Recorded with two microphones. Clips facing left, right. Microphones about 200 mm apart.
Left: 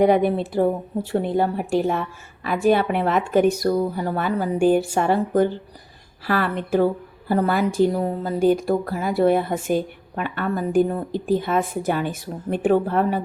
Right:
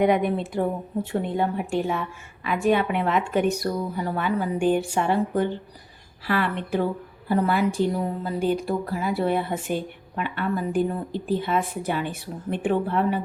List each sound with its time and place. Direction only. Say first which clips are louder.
0.0 s a woman's voice: left 4 dB; 35° left (ahead or behind)